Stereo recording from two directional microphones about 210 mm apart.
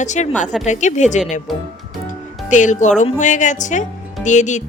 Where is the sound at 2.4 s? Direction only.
35° left (ahead or behind).